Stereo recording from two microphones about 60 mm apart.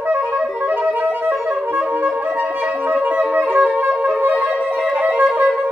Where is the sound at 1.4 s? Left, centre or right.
Right.